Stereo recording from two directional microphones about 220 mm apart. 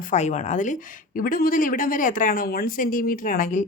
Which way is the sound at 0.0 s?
35° left (ahead or behind).